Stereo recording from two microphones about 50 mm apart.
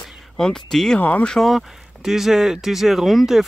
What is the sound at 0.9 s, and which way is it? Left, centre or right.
Speech, left.